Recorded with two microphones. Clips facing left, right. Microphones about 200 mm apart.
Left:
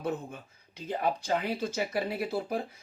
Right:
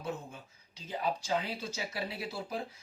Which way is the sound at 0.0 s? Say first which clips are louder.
Left 6 dB; 55° left (ahead or behind).